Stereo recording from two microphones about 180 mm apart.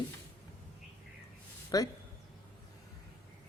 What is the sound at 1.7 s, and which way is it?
Speech, 20° left (ahead or behind).